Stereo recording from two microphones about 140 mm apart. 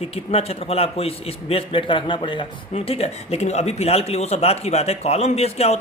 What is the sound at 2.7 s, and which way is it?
A man's voice, 45° left (ahead or behind).